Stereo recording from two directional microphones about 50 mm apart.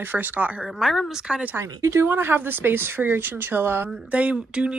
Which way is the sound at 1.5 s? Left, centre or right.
Right.